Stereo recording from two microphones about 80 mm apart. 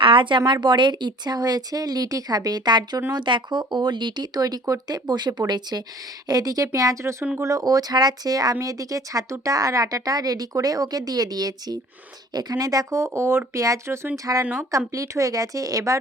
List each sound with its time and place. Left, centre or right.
0.0 s speech: right
3.1 s a woman's voice: right
7.0 s a woman's voice: right
12.9 s a woman's voice: right
14.7 s a woman's voice: right